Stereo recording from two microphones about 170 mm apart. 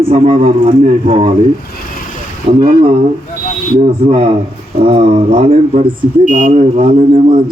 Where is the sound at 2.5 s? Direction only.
40° right (ahead or behind).